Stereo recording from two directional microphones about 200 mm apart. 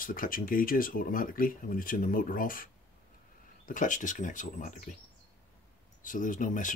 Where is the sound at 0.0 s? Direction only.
45° left (ahead or behind).